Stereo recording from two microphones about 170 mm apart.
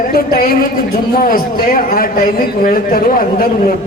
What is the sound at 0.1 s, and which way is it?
A man's voice, 60° left (ahead or behind).